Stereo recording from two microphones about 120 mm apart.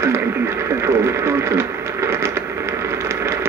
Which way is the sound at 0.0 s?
20° right (ahead or behind).